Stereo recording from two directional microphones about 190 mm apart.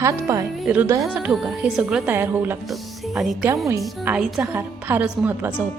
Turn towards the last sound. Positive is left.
turn(degrees=-10)  # may be behind; listen again after turning